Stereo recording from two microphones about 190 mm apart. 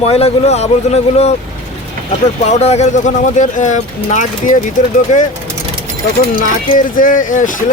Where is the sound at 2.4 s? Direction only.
35° left (ahead or behind).